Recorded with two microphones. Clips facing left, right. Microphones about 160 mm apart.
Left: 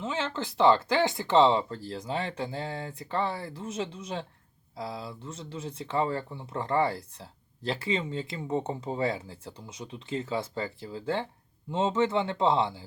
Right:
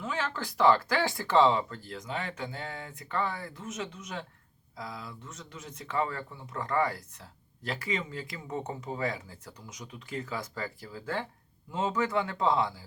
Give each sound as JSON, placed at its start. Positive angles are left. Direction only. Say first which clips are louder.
{"t": 0.0, "sound": "speech", "louder": "left 2 dB", "side_deg": 25}